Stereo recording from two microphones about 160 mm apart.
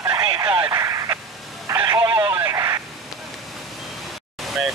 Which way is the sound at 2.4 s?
20° right (ahead or behind).